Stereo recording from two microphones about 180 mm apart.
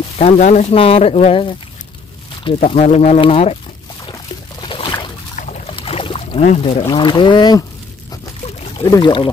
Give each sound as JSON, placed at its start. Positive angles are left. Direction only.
{"t": 0.2, "sound": "speech", "side_deg": 40}
{"t": 4.0, "sound": "pour", "side_deg": 25}
{"t": 5.7, "sound": "speech", "side_deg": 30}
{"t": 8.7, "sound": "speech", "side_deg": 25}